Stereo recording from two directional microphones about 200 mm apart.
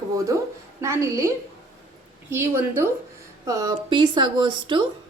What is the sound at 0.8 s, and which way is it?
Speech, 15° right (ahead or behind).